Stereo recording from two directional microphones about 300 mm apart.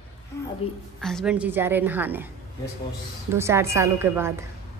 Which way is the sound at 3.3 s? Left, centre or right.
Centre.